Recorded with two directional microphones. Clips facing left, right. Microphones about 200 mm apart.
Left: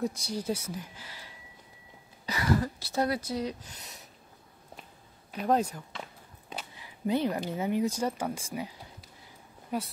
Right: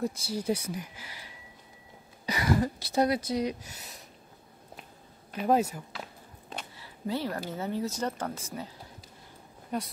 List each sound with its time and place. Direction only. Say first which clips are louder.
0.0 s speech: even; centre (ahead or behind)
0.5 s speech: right 3 dB; 15° right (ahead or behind)
2.2 s speech: right 1 dB; 15° right (ahead or behind)
5.3 s speech: right 2 dB; 5° right (ahead or behind)
6.8 s speech: left 4 dB; 15° left (ahead or behind)